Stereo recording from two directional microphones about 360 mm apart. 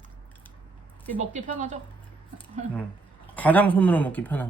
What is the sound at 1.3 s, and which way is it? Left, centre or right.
Speech, centre.